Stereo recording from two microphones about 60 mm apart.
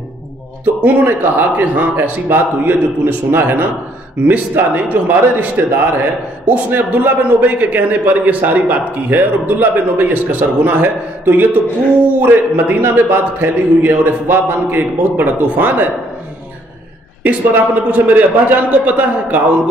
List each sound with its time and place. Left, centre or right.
0.8 s a man's voice: right
17.2 s a man's voice: right